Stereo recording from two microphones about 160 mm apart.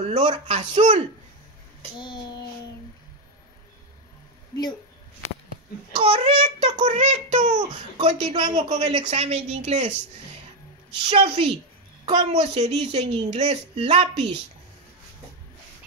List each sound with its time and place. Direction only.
0.0 s a sound: 45° right (ahead or behind)
0.5 s speech: 35° right (ahead or behind)
2.0 s child singing: 30° left (ahead or behind)
5.9 s speech: 35° right (ahead or behind)
6.8 s speech: 50° right (ahead or behind)
8.0 s speech: 35° right (ahead or behind)
11.0 s speech: 35° right (ahead or behind)